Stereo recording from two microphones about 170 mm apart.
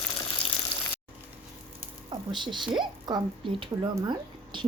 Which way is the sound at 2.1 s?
25° right (ahead or behind).